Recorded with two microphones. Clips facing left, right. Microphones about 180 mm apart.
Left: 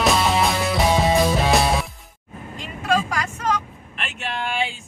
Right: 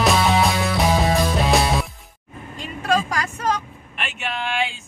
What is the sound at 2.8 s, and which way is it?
Vehicle, 35° right (ahead or behind).